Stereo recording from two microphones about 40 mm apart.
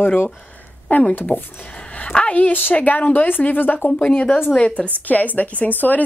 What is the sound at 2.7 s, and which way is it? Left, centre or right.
A woman's voice, left.